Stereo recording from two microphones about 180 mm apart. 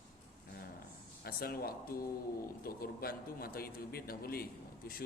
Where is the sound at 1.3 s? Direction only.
55° left (ahead or behind).